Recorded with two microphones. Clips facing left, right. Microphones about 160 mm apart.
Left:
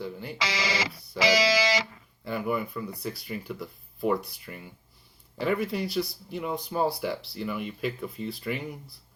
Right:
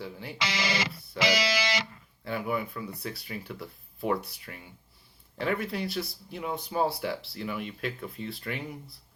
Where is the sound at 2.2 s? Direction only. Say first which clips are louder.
Left 2 dB; centre (ahead or behind).